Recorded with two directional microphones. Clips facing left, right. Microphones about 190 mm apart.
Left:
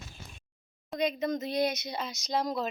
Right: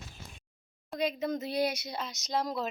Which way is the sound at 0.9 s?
5° right (ahead or behind).